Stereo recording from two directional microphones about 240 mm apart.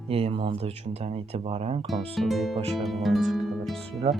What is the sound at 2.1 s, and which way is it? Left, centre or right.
Speech, centre.